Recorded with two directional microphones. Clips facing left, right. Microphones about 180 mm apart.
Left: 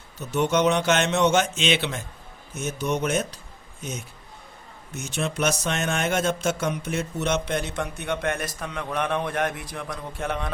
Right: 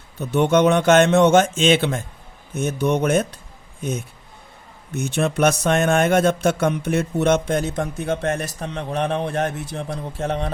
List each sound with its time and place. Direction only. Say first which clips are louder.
0.2 s speech: right 5 dB; 55° right (ahead or behind)
5.0 s a man's voice: right 7 dB; 60° right (ahead or behind); by 10.5 s 35° right (ahead or behind)